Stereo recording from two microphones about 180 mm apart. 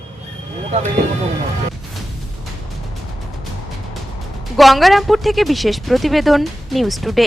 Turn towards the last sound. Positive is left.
turn(degrees=0)  # may be behind; listen again after turning